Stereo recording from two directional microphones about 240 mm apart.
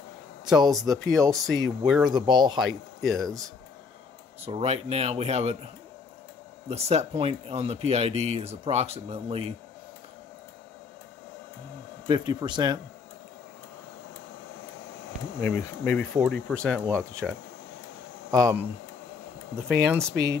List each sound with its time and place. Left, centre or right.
0.5 s speech: centre
1.3 s speech: centre
2.0 s speech: centre
3.1 s speech: centre
4.4 s speech: right
6.7 s speech: right
12.1 s speech: centre
15.4 s speech: centre
18.3 s speech: centre